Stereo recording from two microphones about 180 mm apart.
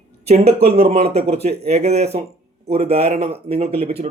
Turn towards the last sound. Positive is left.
turn(degrees=-35)  # may be behind; listen again after turning